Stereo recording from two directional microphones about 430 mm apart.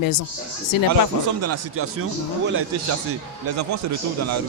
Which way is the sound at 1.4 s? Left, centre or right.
Right.